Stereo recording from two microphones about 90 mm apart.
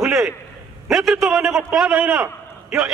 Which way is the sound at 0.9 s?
Centre (ahead or behind).